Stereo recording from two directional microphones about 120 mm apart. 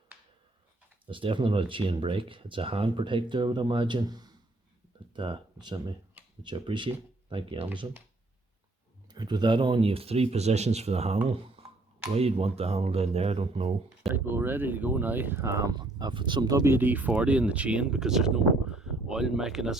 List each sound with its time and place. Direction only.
1.0 s speech: 45° right (ahead or behind)
9.0 s speech: 35° right (ahead or behind); by 11.2 s 65° right (ahead or behind)
11.3 s speech: 50° right (ahead or behind)
14.3 s speech: 20° right (ahead or behind); by 16.6 s 35° right (ahead or behind)
16.6 s speech: 15° right (ahead or behind)